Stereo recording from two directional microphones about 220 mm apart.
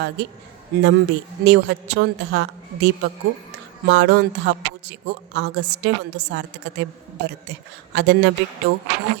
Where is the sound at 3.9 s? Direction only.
55° right (ahead or behind).